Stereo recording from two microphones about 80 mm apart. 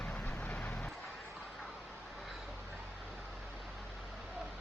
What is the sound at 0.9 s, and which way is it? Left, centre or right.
Vehicle, centre.